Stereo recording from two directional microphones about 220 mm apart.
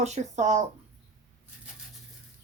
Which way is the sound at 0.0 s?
30° right (ahead or behind).